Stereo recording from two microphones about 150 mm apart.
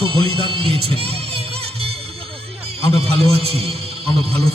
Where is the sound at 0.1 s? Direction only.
40° right (ahead or behind).